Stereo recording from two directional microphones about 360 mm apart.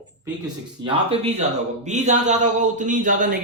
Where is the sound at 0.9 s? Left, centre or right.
Centre.